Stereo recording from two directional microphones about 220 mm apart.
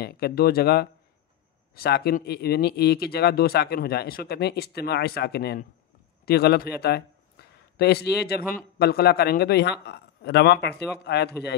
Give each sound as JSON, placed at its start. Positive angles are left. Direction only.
{"t": 0.0, "sound": "speech", "side_deg": 45}
{"t": 6.2, "sound": "a sound", "side_deg": 45}
{"t": 8.5, "sound": "speech", "side_deg": 45}